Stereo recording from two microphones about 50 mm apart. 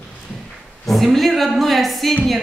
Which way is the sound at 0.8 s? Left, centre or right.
Centre.